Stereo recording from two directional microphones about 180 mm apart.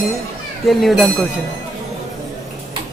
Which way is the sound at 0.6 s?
Centre (ahead or behind).